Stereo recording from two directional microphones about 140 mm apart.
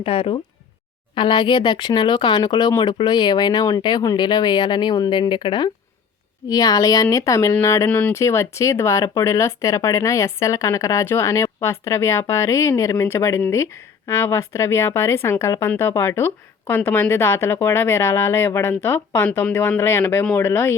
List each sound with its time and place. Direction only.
0.0 s speech: 40° left (ahead or behind); by 20.7 s 15° left (ahead or behind)